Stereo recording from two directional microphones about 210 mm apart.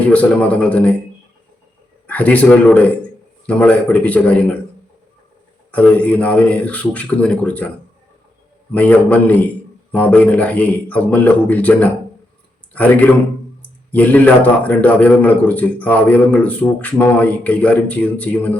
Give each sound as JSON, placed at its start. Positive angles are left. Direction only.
{"t": 0.1, "sound": "a man's voice", "side_deg": 5}
{"t": 2.0, "sound": "a man's voice", "side_deg": 5}
{"t": 5.7, "sound": "a man's voice", "side_deg": 5}
{"t": 8.7, "sound": "a man's voice", "side_deg": 5}